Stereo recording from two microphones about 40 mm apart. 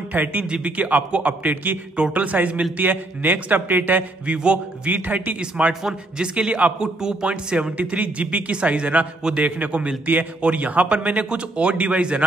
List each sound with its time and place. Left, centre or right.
0.1 s a man's voice: right
2.8 s a man's voice: right
6.1 s a man's voice: right
6.8 s a man's voice: centre
7.5 s a man's voice: right